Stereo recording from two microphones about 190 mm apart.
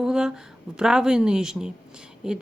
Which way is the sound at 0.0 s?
5° right (ahead or behind).